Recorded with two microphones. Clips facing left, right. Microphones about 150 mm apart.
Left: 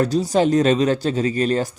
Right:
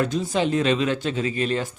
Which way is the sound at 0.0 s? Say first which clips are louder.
Left 5 dB; 40° left (ahead or behind).